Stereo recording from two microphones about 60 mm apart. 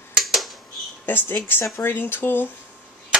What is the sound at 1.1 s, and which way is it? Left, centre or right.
Speech, left.